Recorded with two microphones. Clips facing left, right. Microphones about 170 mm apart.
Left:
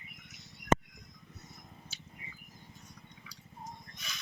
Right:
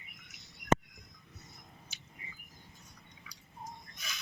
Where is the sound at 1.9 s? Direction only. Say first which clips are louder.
Left 3 dB; 15° right (ahead or behind).